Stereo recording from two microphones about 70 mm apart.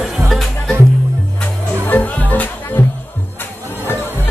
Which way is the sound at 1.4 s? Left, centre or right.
Left.